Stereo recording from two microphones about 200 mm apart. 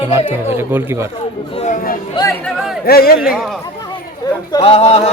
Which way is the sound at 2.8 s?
50° left (ahead or behind).